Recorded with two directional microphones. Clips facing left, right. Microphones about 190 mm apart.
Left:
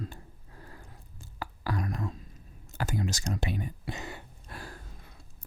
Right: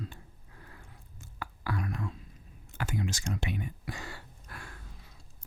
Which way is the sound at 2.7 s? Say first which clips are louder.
Left 2 dB; 40° left (ahead or behind).